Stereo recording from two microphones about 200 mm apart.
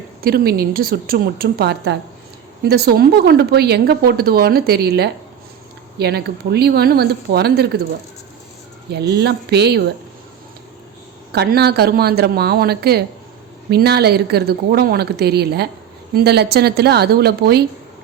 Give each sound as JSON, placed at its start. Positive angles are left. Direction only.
{"t": 0.2, "sound": "speech", "side_deg": -50}
{"t": 8.9, "sound": "speech", "side_deg": -55}
{"t": 11.3, "sound": "speech", "side_deg": -55}